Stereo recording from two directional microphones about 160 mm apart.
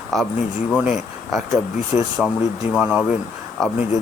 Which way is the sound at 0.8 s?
Centre (ahead or behind).